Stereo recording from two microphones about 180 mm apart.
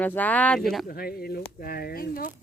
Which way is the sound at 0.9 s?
55° left (ahead or behind).